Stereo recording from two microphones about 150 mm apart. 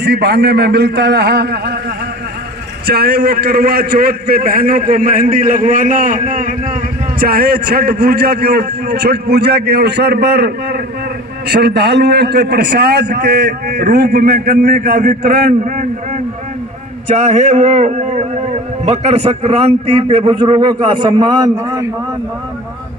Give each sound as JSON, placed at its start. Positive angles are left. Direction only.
{"t": 0.0, "sound": "a man's voice", "side_deg": -90}
{"t": 2.8, "sound": "a man's voice", "side_deg": -90}
{"t": 7.2, "sound": "a man's voice", "side_deg": -85}
{"t": 17.1, "sound": "a man's voice", "side_deg": -50}